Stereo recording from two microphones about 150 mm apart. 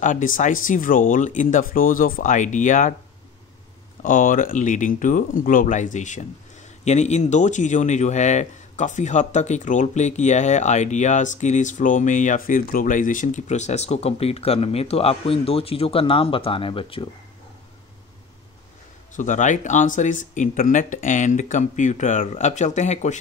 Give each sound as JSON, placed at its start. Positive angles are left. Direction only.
{"t": 0.0, "sound": "speech", "side_deg": 60}
{"t": 4.0, "sound": "speech", "side_deg": 65}
{"t": 19.1, "sound": "speech", "side_deg": 55}